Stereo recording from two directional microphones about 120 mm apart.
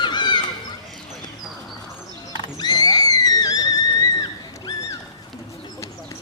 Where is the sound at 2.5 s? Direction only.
35° left (ahead or behind).